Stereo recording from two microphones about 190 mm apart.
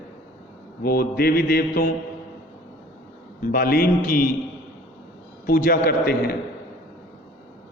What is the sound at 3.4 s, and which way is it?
Speech, 50° left (ahead or behind).